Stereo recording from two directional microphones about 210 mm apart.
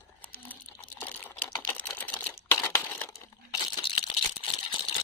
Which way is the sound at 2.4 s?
10° left (ahead or behind).